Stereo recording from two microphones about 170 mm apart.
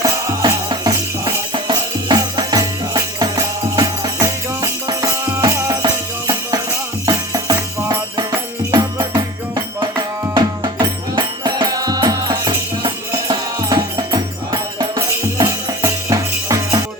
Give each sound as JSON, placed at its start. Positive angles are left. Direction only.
{"t": 0.3, "sound": "music", "side_deg": -20}